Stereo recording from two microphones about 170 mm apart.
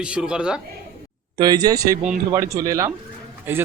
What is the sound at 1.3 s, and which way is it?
A man's voice, 25° right (ahead or behind).